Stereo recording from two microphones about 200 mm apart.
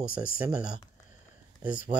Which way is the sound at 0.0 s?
45° left (ahead or behind).